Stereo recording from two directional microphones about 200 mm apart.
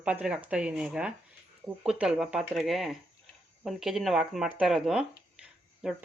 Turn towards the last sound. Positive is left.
turn(degrees=-5)  # may be behind; listen again after turning